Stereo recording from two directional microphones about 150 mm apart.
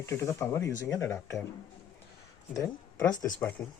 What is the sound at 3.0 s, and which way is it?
Speech, 25° left (ahead or behind).